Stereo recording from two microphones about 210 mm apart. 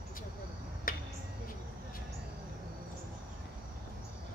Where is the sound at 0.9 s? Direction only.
40° left (ahead or behind).